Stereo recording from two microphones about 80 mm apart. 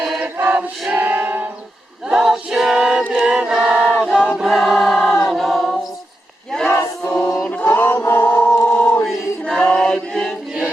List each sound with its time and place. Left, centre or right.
0.2 s choir: right
2.0 s a sound: centre
3.2 s choir: centre
5.3 s a capella: centre
6.7 s choir: left
7.3 s chant: centre
7.5 s chant: left
9.4 s chant: centre